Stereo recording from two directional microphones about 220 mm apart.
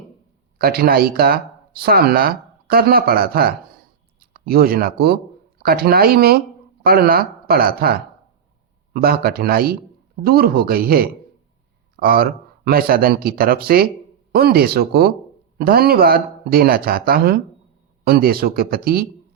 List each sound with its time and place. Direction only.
0.6 s speech: 45° right (ahead or behind)